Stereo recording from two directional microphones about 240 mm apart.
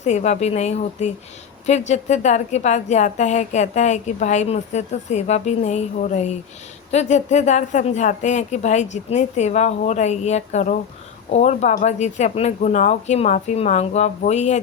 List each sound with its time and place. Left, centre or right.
0.0 s a woman's voice: left